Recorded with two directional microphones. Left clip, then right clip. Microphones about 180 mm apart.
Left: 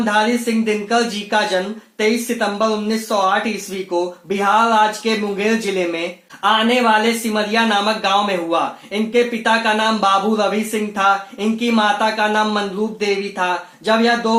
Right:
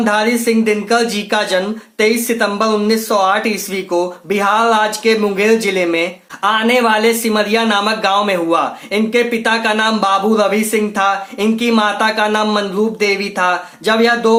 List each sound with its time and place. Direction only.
0.0 s speech: 20° right (ahead or behind)